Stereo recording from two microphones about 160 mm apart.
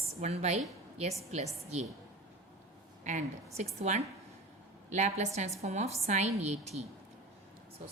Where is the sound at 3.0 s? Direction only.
50° right (ahead or behind).